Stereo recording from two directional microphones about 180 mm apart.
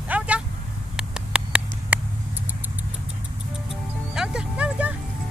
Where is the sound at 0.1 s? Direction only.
10° right (ahead or behind).